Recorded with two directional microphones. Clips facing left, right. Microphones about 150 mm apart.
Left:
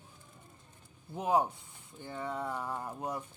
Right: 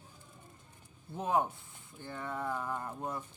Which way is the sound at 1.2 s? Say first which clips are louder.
Left 2 dB; 15° left (ahead or behind).